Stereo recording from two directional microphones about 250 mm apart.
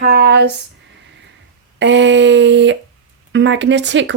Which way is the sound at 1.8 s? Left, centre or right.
Right.